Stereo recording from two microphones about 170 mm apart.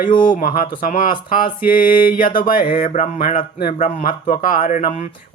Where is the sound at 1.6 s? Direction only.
60° left (ahead or behind).